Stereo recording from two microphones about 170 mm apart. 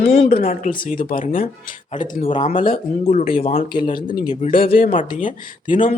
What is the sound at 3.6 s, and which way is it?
Speech, 30° left (ahead or behind).